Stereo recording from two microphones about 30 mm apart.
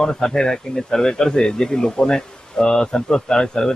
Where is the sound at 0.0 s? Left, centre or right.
Left.